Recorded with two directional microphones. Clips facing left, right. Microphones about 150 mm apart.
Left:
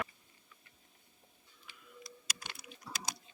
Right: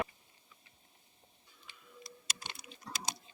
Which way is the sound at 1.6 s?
25° right (ahead or behind).